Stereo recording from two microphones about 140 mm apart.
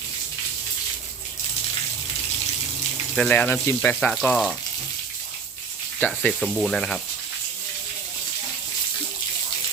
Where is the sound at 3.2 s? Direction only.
10° left (ahead or behind).